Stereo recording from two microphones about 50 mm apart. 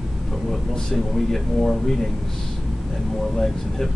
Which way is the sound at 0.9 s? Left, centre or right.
Centre.